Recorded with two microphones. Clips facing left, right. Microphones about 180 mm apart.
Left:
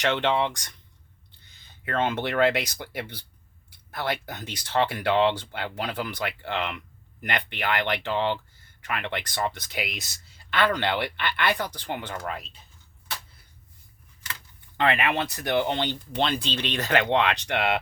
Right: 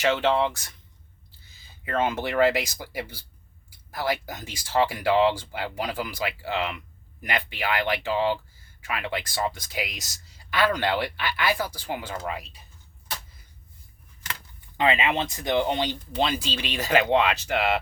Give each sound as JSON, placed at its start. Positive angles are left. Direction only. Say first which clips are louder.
{"t": 0.0, "sound": "speech", "louder": "right 2 dB", "side_deg": -5}
{"t": 9.9, "sound": "speech", "louder": "left 3 dB", "side_deg": 60}
{"t": 10.5, "sound": "speech", "louder": "right 1 dB", "side_deg": -10}
{"t": 14.8, "sound": "speech", "louder": "right 1 dB", "side_deg": -15}